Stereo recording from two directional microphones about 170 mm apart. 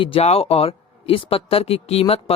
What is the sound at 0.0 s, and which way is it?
Speech, 35° left (ahead or behind).